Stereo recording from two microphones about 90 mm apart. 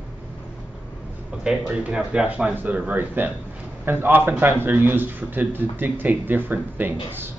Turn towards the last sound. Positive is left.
turn(degrees=-20)  # may be behind; listen again after turning